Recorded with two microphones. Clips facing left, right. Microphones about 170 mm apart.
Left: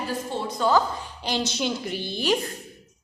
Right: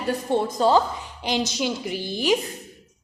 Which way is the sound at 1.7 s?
Centre (ahead or behind).